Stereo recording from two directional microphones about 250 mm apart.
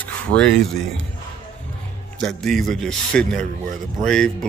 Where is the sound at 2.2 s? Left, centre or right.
Centre.